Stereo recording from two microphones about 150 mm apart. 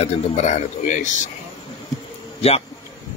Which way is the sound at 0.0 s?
50° left (ahead or behind).